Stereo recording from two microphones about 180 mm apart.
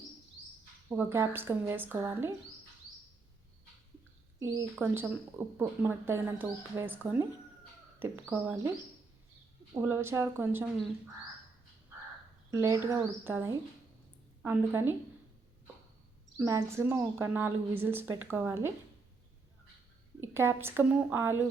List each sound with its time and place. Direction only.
0.9 s speech: 15° right (ahead or behind)
4.4 s a woman's voice: 20° right (ahead or behind)
9.7 s speech: 15° right (ahead or behind)
12.5 s speech: 15° right (ahead or behind)
16.4 s speech: 15° right (ahead or behind)
20.3 s speech: 15° right (ahead or behind)